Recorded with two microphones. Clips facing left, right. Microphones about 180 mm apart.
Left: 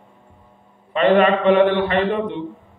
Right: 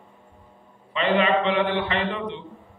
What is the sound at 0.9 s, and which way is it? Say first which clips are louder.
A man's voice: left 6 dB; 50° left (ahead or behind).